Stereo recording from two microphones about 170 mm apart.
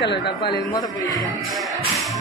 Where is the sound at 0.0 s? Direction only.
85° left.